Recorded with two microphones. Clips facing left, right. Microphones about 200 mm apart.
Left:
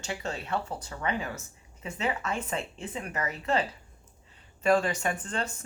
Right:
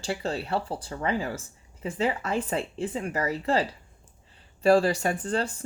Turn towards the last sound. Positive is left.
turn(degrees=-35)  # may be behind; listen again after turning